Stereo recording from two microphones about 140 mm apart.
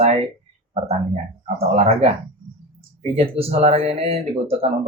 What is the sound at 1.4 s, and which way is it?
Speech, 50° right (ahead or behind).